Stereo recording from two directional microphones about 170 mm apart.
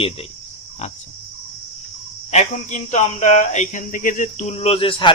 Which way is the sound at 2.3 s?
45° left (ahead or behind).